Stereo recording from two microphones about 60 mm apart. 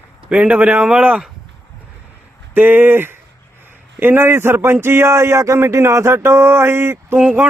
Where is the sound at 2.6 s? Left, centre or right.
Right.